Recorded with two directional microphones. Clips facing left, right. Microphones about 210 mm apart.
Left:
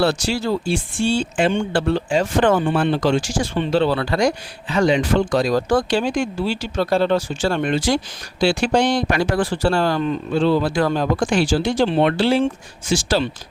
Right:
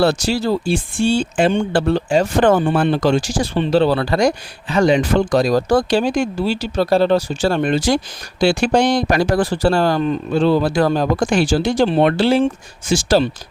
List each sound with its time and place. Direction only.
0.0 s speech: 40° right (ahead or behind)